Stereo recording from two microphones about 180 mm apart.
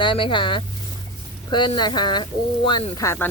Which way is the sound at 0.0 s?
25° left (ahead or behind).